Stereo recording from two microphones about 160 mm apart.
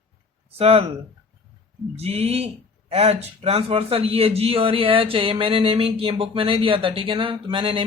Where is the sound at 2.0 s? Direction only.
40° right (ahead or behind).